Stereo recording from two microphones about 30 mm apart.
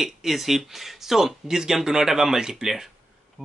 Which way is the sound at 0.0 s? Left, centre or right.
Centre.